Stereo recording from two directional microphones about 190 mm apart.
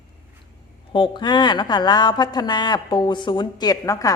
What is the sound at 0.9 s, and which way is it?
Speech, 25° left (ahead or behind).